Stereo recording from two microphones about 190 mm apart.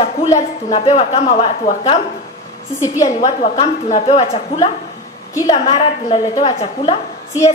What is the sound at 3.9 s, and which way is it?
A woman's voice, 30° left (ahead or behind).